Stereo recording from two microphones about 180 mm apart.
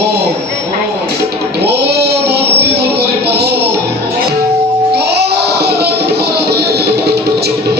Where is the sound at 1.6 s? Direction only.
65° right (ahead or behind).